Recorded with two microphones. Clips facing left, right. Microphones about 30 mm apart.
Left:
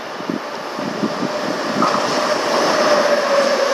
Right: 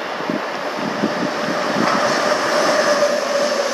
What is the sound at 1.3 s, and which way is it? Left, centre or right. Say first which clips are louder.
Train: right 1 dB; centre.